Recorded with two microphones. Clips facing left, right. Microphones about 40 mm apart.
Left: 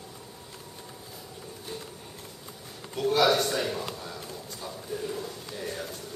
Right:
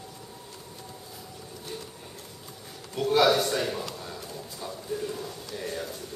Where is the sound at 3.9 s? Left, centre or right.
Centre.